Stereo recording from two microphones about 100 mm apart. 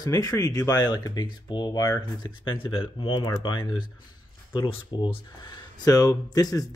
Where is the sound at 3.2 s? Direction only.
50° left (ahead or behind).